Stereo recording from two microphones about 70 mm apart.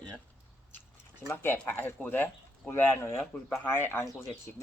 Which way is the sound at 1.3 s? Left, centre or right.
Left.